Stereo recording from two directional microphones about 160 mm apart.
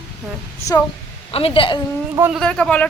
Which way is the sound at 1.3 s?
35° left (ahead or behind).